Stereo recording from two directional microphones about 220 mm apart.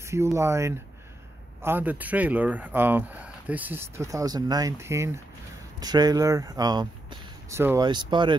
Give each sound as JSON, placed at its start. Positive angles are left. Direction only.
{"t": 0.0, "sound": "speech", "side_deg": -10}